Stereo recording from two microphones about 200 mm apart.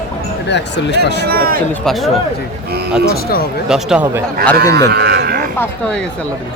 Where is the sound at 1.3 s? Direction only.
50° right (ahead or behind).